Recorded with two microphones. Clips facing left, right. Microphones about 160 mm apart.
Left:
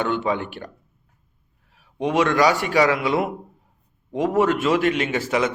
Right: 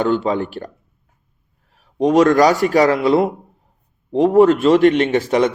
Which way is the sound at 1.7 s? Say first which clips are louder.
Right 8 dB; 40° right (ahead or behind).